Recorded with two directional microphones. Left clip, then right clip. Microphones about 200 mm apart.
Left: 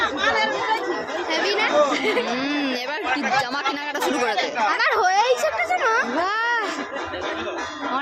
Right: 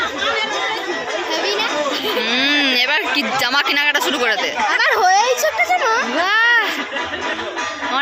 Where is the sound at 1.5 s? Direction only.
30° right (ahead or behind).